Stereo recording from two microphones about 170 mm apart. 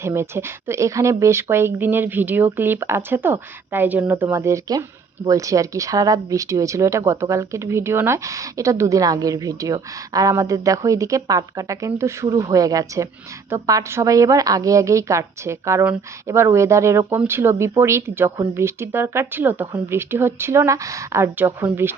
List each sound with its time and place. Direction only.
0.0 s speech: 15° right (ahead or behind)